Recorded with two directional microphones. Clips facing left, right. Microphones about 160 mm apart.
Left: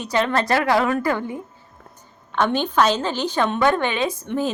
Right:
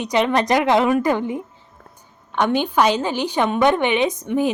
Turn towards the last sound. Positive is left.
turn(degrees=-15)  # may be behind; listen again after turning